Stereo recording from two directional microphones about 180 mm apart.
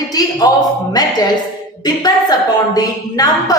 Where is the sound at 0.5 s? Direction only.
20° left (ahead or behind).